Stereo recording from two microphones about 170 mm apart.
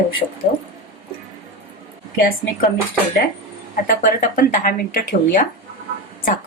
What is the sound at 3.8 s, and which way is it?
Speech, 55° left (ahead or behind).